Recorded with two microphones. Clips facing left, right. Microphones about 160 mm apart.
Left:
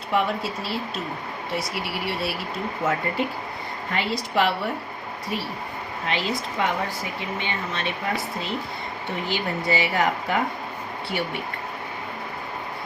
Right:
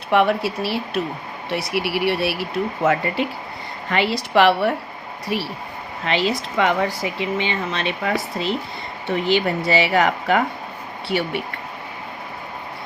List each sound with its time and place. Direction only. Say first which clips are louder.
0.1 s speech: right 6 dB; 70° right (ahead or behind)
6.1 s speech: right 6 dB; 85° right